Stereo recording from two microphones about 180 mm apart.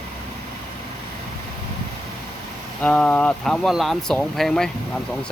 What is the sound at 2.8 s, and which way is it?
Speech, 10° left (ahead or behind).